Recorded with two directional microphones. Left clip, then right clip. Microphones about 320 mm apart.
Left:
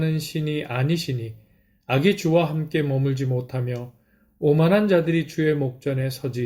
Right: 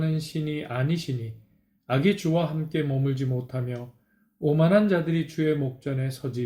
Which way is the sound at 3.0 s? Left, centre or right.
Left.